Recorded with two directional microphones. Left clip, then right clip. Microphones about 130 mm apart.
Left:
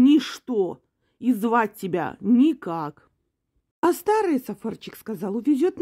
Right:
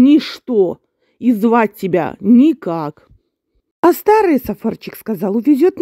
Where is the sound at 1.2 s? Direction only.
45° right (ahead or behind).